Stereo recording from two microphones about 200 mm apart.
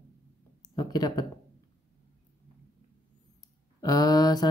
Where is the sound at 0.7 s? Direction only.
20° left (ahead or behind).